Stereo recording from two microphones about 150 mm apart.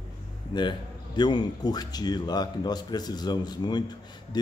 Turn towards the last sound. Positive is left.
turn(degrees=30)  # may be behind; listen again after turning